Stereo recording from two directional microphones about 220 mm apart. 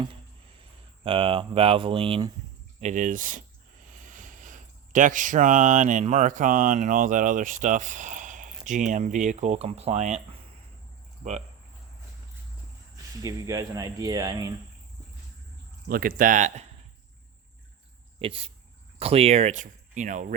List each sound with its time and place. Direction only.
1.0 s speech: 25° right (ahead or behind)
11.2 s speech: 30° right (ahead or behind)
13.2 s speech: 15° right (ahead or behind)
15.9 s speech: 40° right (ahead or behind)
18.2 s speech: 25° right (ahead or behind)